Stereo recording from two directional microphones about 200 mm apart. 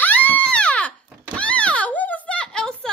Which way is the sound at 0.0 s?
10° left (ahead or behind).